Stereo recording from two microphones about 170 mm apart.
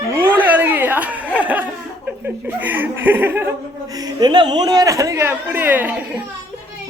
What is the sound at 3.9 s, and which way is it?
Speech, 25° right (ahead or behind).